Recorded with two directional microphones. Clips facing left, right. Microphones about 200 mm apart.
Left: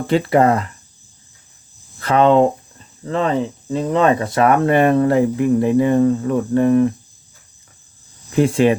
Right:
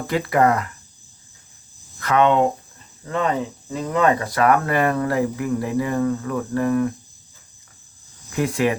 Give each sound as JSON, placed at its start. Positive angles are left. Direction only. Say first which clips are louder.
{"t": 0.1, "sound": "speech", "louder": "left 4 dB", "side_deg": 25}
{"t": 2.0, "sound": "speech", "louder": "left 4 dB", "side_deg": 30}
{"t": 8.4, "sound": "speech", "louder": "left 6 dB", "side_deg": 30}